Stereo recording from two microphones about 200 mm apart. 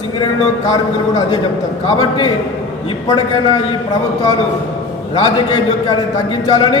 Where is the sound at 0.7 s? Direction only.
20° left (ahead or behind).